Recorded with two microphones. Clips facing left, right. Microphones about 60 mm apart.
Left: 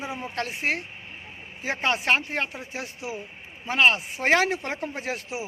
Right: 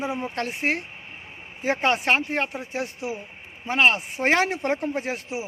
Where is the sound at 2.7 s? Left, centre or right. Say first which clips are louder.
Right 5 dB; right.